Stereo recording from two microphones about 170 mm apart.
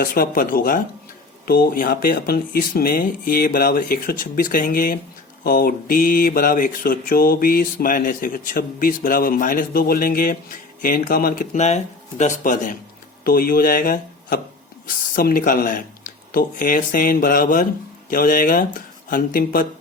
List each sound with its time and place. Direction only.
0.0 s mantra: 55° left (ahead or behind)
13.2 s speech: 55° left (ahead or behind)
14.8 s mantra: 55° left (ahead or behind)